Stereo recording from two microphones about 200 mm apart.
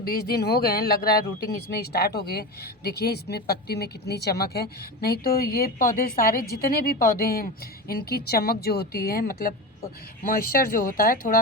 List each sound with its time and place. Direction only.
0.0 s speech: 50° left (ahead or behind)